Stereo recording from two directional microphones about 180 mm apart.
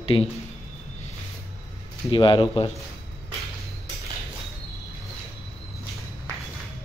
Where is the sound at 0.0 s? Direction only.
30° left (ahead or behind).